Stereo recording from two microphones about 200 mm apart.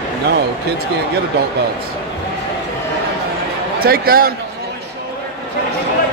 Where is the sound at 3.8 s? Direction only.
45° right (ahead or behind).